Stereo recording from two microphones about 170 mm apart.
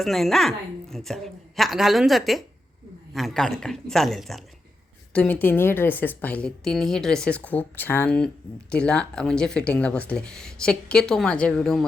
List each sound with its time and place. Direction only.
0.0 s speech: centre (ahead or behind)